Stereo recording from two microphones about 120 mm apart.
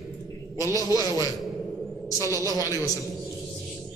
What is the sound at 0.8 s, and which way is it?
A woman's voice, 30° left (ahead or behind).